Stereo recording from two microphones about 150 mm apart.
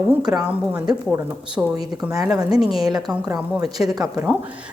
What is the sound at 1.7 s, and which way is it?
Speech, 25° right (ahead or behind).